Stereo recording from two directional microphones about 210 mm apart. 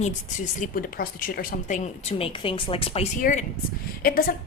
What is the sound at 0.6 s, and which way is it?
A woman's voice, 40° left (ahead or behind).